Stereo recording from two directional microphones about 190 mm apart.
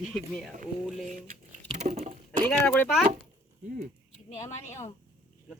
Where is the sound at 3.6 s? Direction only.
40° right (ahead or behind).